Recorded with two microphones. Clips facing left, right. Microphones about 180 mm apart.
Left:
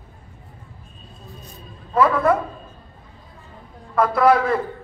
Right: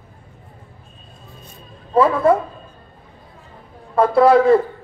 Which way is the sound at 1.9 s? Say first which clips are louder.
Right 3 dB; 30° right (ahead or behind).